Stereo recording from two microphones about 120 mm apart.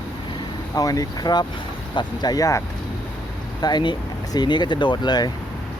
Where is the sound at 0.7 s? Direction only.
30° left (ahead or behind).